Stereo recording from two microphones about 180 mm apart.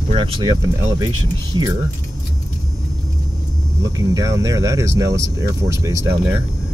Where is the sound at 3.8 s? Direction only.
20° right (ahead or behind).